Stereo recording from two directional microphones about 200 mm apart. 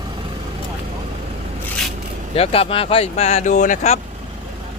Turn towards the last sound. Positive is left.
turn(degrees=35)  # may be behind; listen again after turning